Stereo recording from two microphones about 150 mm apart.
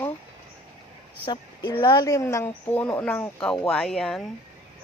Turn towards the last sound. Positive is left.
turn(degrees=5)  # may be behind; listen again after turning